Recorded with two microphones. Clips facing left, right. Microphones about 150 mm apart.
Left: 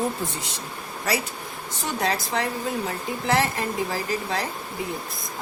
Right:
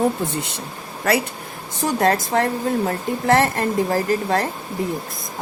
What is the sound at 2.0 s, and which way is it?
A woman's voice, 45° right (ahead or behind).